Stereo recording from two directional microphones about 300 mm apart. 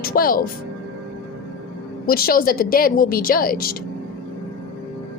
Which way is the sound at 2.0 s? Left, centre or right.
Left.